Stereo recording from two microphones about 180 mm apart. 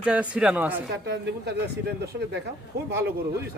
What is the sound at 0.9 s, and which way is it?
Speech, 70° right (ahead or behind).